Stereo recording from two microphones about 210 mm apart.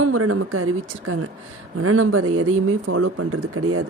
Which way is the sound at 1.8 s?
80° right.